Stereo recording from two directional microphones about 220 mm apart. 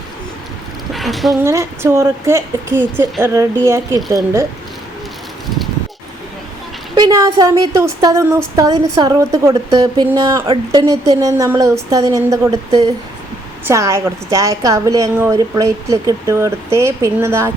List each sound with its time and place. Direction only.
0.9 s a woman's voice: centre (ahead or behind)
1.5 s a woman's voice: 10° right (ahead or behind)
6.9 s a woman's voice: 15° right (ahead or behind)